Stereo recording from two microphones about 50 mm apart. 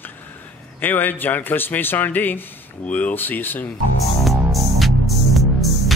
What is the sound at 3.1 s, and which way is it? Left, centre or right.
Speech, left.